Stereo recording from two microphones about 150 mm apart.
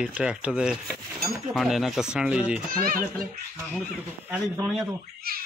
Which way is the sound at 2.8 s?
70° right (ahead or behind).